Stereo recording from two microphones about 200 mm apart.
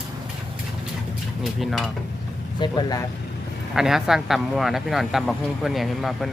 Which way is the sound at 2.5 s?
20° left (ahead or behind).